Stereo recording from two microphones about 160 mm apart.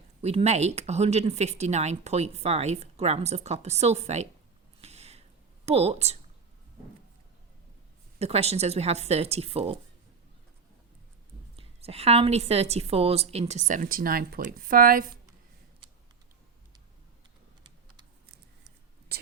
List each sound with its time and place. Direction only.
0.2 s a woman's voice: 40° right (ahead or behind)
4.8 s a sound: 40° right (ahead or behind)
5.6 s speech: 40° right (ahead or behind)
8.2 s speech: 40° right (ahead or behind)
11.5 s a woman's voice: 40° right (ahead or behind); by 15.1 s 65° right (ahead or behind)